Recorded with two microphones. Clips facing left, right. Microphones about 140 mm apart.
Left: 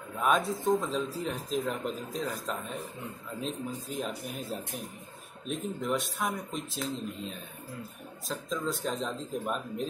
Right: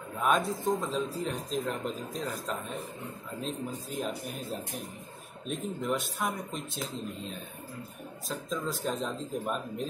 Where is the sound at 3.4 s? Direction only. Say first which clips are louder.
Even; centre (ahead or behind).